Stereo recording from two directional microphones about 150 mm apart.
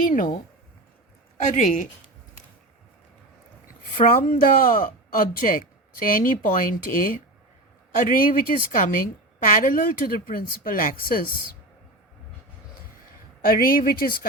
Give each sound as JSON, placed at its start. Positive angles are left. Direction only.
{"t": 0.1, "sound": "speech", "side_deg": 65}
{"t": 1.4, "sound": "speech", "side_deg": 55}
{"t": 3.9, "sound": "speech", "side_deg": 70}
{"t": 13.4, "sound": "speech", "side_deg": 75}